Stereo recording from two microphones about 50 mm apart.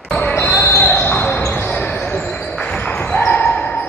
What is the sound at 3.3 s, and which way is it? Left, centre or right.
Dog, left.